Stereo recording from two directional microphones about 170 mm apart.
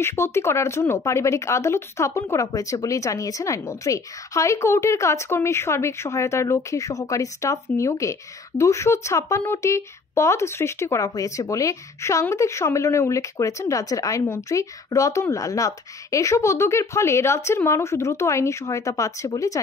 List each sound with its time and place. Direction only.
0.0 s a woman's voice: 15° left (ahead or behind)